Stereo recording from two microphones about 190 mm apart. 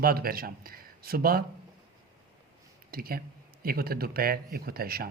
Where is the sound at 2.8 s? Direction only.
50° right (ahead or behind).